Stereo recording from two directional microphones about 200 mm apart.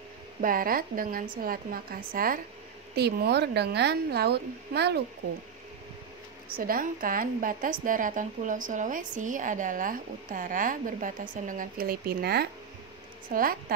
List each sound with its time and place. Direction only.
0.4 s a woman's voice: 45° right (ahead or behind)
6.5 s a woman's voice: 45° right (ahead or behind)